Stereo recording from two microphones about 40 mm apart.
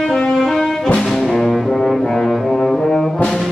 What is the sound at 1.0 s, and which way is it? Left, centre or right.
Brass instrument, centre.